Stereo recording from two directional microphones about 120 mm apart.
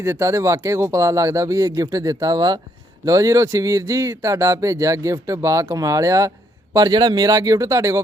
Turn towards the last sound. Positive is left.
turn(degrees=-25)  # may be behind; listen again after turning